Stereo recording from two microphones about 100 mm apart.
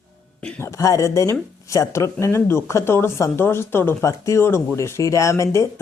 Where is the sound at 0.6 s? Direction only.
30° left (ahead or behind).